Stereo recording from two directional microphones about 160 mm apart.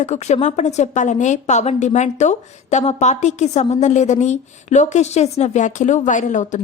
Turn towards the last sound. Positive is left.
turn(degrees=50)  # may be behind; listen again after turning